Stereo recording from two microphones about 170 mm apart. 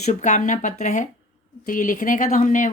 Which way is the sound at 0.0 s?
45° left (ahead or behind).